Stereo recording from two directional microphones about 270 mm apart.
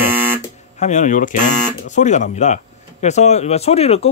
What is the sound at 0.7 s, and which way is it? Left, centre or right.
Speech, left.